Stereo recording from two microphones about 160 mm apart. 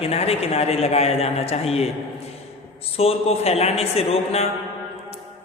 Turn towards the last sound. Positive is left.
turn(degrees=35)  # may be behind; listen again after turning